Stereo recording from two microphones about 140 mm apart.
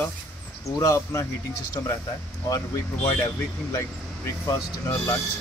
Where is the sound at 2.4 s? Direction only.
25° left (ahead or behind).